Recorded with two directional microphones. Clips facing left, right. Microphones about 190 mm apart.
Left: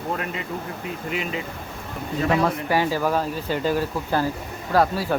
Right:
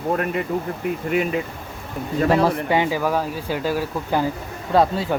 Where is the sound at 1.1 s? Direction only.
50° right (ahead or behind).